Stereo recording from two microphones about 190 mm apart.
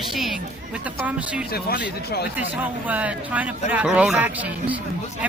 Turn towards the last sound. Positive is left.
turn(degrees=-5)  # may be behind; listen again after turning